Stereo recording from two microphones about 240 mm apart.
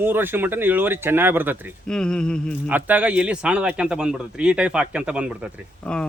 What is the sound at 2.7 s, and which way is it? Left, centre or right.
Speech, centre.